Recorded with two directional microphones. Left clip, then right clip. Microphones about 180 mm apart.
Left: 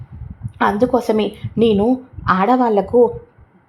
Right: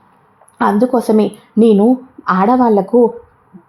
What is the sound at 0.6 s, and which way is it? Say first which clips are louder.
A woman's voice: right 2 dB; 25° right (ahead or behind).